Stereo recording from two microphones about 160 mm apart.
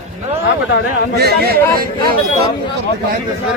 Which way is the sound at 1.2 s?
80° right.